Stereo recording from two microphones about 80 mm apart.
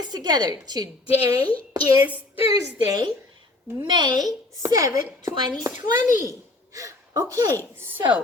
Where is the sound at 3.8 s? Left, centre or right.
Right.